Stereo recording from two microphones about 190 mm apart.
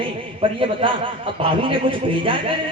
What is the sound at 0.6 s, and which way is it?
A man's voice, 30° right (ahead or behind).